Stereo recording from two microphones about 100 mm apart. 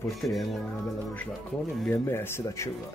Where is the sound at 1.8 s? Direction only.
25° left (ahead or behind).